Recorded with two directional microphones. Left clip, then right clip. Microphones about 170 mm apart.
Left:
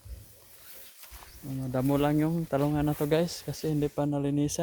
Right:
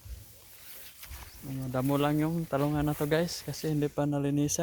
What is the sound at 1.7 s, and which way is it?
Speech, 25° left (ahead or behind).